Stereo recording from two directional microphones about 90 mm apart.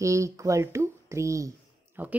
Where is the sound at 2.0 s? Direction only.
20° right (ahead or behind).